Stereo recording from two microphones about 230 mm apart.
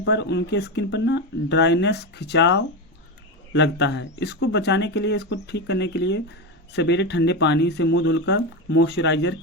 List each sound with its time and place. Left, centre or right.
0.0 s speech: left